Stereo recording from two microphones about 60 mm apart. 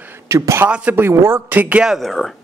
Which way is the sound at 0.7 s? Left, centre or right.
Centre.